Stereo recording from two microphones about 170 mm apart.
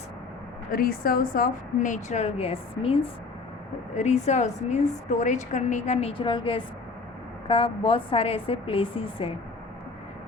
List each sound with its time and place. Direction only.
0.7 s a woman's voice: 60° left (ahead or behind); by 9.3 s 30° left (ahead or behind)